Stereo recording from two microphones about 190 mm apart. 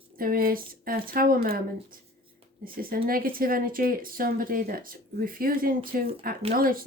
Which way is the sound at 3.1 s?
50° right (ahead or behind).